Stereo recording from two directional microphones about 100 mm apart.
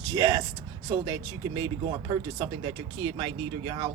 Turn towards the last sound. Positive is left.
turn(degrees=-55)  # may be behind; listen again after turning